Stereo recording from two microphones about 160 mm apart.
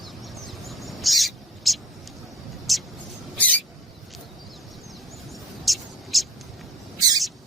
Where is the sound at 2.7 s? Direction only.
Centre (ahead or behind).